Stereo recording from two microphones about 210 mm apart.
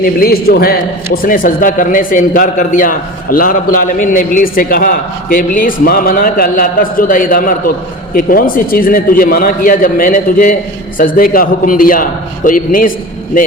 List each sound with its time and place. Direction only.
0.0 s a man's voice: 45° left (ahead or behind)